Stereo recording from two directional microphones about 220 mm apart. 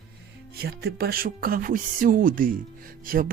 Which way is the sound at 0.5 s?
45° right (ahead or behind).